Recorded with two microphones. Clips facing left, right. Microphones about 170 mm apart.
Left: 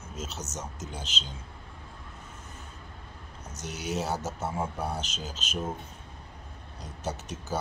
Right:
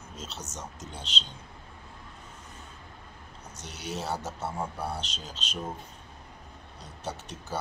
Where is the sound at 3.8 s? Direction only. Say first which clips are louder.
Left 2 dB; 5° left (ahead or behind).